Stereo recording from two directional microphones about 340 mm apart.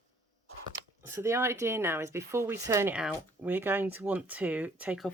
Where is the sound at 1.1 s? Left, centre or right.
Centre.